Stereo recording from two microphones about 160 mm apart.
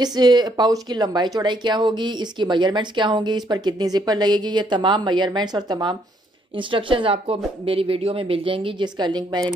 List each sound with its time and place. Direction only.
0.0 s speech: 25° right (ahead or behind)